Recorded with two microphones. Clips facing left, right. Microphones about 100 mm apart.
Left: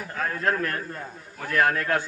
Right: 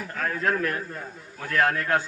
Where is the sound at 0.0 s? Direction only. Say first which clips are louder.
Even; 5° left (ahead or behind).